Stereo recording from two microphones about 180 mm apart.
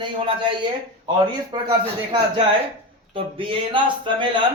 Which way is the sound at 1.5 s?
25° right (ahead or behind).